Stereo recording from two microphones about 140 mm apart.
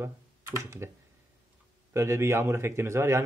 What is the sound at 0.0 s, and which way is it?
Computer keyboard, 20° right (ahead or behind).